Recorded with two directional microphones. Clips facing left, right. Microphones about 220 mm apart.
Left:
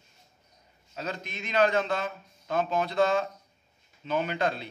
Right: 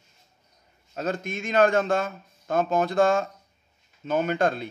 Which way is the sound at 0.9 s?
50° right (ahead or behind).